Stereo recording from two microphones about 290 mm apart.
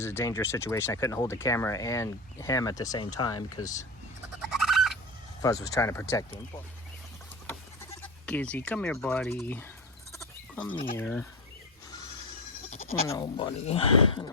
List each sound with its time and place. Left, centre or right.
0.0 s speech: centre
4.5 s bird: centre
5.4 s speech: centre
7.4 s speech: centre
10.1 s sheep: centre
10.9 s speech: centre
12.9 s speech: centre